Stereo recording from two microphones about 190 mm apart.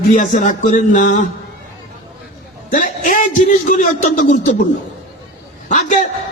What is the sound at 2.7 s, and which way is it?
A man's voice, 40° left (ahead or behind).